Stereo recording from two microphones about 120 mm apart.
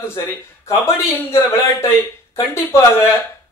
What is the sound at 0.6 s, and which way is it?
A man's voice, 20° left (ahead or behind).